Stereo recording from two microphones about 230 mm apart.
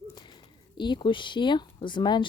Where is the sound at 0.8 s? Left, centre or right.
Left.